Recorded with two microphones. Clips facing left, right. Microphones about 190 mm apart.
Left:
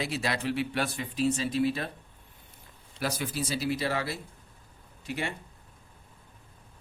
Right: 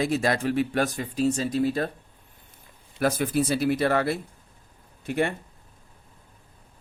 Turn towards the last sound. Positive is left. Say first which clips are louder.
# right 9 dB
turn(degrees=-55)  # may be behind; listen again after turning